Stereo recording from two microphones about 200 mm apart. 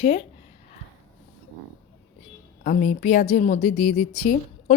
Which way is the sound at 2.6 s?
40° left (ahead or behind).